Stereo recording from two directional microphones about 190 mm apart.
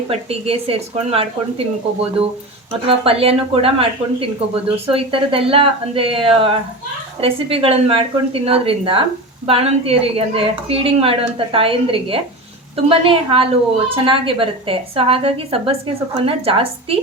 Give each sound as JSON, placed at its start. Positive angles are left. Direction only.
{"t": 0.1, "sound": "speech", "side_deg": -30}
{"t": 2.8, "sound": "speech", "side_deg": -30}